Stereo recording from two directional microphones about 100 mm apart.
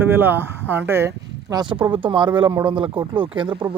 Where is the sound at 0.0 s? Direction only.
20° right (ahead or behind).